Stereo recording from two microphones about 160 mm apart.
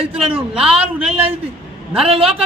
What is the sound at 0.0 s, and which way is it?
Speech, 35° right (ahead or behind).